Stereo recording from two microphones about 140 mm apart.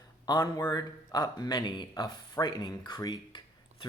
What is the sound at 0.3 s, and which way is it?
Speech, 30° left (ahead or behind).